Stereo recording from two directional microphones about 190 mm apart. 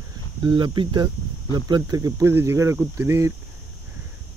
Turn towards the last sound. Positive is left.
turn(degrees=-15)  # may be behind; listen again after turning